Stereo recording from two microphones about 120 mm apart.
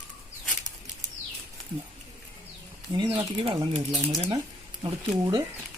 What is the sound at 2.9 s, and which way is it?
Speech, 40° right (ahead or behind).